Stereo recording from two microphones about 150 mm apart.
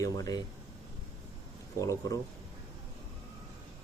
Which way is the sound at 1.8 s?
20° left (ahead or behind).